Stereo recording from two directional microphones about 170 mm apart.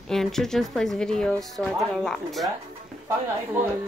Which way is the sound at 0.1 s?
Centre (ahead or behind).